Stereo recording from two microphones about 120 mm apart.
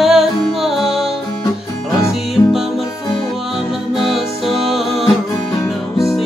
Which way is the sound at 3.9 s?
Centre (ahead or behind).